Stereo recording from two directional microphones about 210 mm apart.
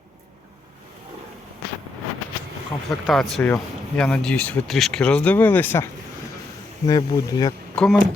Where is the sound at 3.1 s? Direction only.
Centre (ahead or behind); by 7.5 s 20° left (ahead or behind).